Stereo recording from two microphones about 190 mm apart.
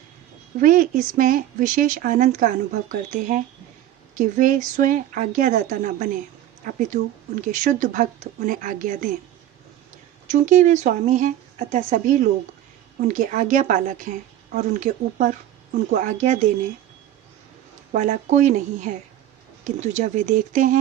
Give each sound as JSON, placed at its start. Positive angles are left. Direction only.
{"t": 0.6, "sound": "speech", "side_deg": -45}
{"t": 10.3, "sound": "speech", "side_deg": -40}
{"t": 17.9, "sound": "speech", "side_deg": -40}